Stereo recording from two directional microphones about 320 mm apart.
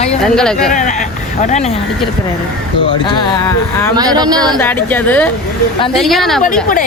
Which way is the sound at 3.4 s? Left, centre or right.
Centre.